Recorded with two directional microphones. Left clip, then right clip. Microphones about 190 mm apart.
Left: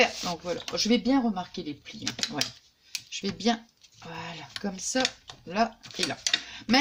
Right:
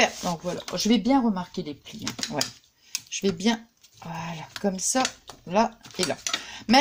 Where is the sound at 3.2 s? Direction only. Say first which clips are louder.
Right 3 dB; 45° right (ahead or behind).